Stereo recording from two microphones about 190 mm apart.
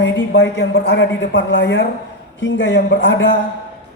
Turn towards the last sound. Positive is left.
turn(degrees=70)  # may be behind; listen again after turning